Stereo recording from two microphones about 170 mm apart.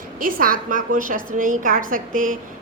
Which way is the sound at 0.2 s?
55° right (ahead or behind).